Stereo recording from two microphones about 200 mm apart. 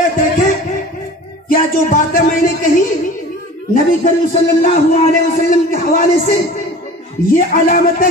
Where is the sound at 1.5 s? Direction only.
45° left (ahead or behind).